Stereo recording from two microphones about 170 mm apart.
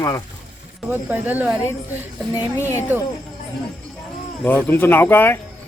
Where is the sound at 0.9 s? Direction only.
10° right (ahead or behind).